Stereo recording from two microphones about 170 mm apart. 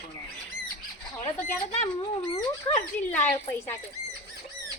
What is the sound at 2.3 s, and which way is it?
Speech, 25° left (ahead or behind).